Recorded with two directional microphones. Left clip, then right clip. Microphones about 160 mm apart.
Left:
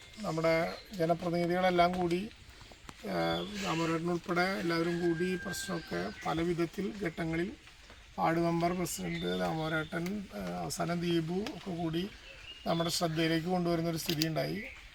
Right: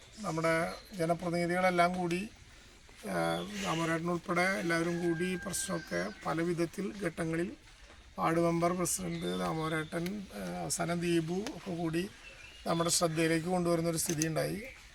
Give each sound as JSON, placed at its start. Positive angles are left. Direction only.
{"t": 0.2, "sound": "speech", "side_deg": 0}
{"t": 5.9, "sound": "a man's voice", "side_deg": -5}